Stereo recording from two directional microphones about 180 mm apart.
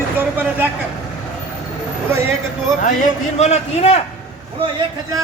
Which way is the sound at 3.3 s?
35° left (ahead or behind).